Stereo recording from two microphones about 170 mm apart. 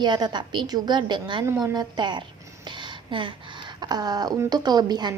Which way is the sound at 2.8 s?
30° right (ahead or behind).